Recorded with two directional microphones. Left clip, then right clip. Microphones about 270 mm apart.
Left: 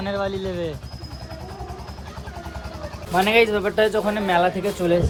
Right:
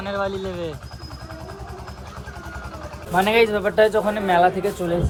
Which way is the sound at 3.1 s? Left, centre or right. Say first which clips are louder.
Even; centre.